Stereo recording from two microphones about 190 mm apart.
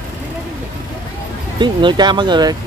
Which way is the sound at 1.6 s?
25° right (ahead or behind).